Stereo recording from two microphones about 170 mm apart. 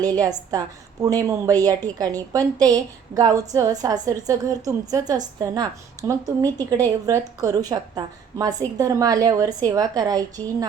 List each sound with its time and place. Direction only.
0.0 s a woman's voice: 20° right (ahead or behind)